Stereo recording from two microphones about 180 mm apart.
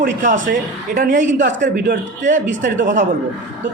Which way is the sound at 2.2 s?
45° right (ahead or behind).